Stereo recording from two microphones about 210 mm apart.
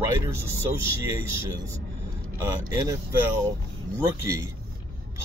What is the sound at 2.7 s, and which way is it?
Speech, 15° right (ahead or behind).